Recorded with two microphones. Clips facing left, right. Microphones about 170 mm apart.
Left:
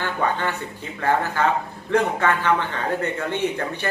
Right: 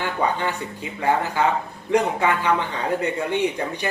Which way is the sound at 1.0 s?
15° right (ahead or behind).